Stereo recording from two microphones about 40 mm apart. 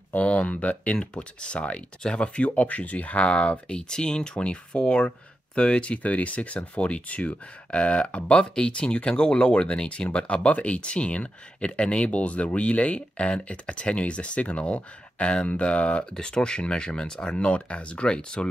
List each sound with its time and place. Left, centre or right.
0.1 s speech: left
0.9 s speech: left
16.1 s speech: centre